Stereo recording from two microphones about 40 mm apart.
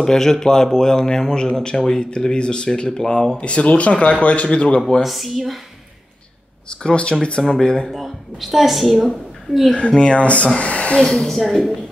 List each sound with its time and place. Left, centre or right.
0.0 s speech: centre
3.4 s speech: left
5.0 s a woman's voice: centre
6.7 s speech: left
7.9 s a woman's voice: centre
9.8 s speech: left
11.1 s speech: centre